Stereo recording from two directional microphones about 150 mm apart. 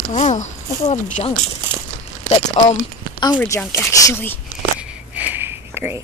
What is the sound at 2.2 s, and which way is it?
Speech, 45° left (ahead or behind).